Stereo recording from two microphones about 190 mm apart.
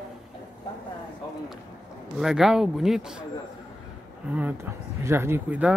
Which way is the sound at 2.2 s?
Centre (ahead or behind).